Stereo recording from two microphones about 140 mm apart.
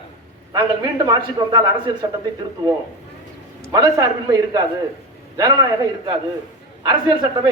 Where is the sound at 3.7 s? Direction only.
25° right (ahead or behind).